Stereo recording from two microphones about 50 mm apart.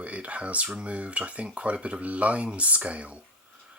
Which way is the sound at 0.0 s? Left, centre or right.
Right.